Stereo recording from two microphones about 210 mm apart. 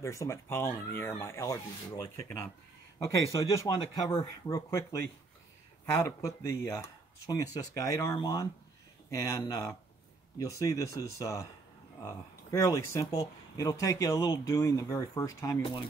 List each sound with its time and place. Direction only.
0.0 s speech: 15° left (ahead or behind)
5.9 s speech: 15° left (ahead or behind)